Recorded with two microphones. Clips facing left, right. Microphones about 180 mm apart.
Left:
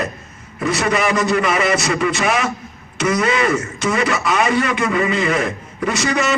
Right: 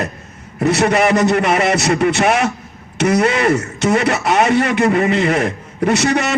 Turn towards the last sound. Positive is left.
turn(degrees=-65)  # may be behind; listen again after turning